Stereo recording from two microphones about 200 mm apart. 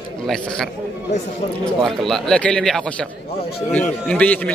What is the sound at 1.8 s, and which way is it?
A man's voice, centre (ahead or behind).